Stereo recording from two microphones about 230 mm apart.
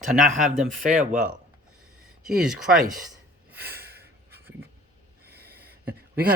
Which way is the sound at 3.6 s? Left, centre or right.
Right.